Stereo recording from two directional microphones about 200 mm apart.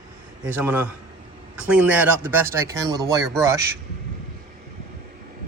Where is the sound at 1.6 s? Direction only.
5° right (ahead or behind).